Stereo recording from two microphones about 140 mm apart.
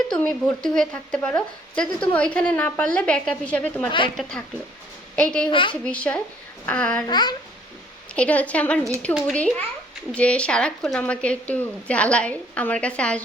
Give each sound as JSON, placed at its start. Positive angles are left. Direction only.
{"t": 0.1, "sound": "a woman's voice", "side_deg": 5}
{"t": 5.5, "sound": "a woman's voice", "side_deg": 35}
{"t": 5.8, "sound": "a woman's voice", "side_deg": 10}
{"t": 7.1, "sound": "a woman's voice", "side_deg": 30}
{"t": 8.1, "sound": "a woman's voice", "side_deg": 10}